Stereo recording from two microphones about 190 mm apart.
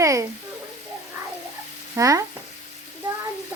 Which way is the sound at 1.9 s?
15° right (ahead or behind).